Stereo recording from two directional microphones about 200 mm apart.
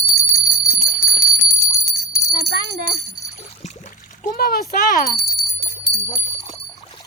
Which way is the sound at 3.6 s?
35° left (ahead or behind).